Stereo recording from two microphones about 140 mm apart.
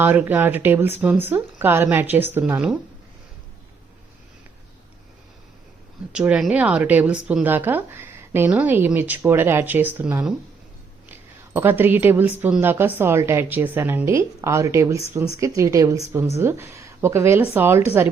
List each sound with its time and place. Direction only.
0.0 s speech: 15° right (ahead or behind)
6.1 s a woman's voice: 5° right (ahead or behind)